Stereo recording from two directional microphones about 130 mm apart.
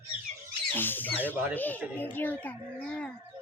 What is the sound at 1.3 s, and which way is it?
Speech, 15° right (ahead or behind).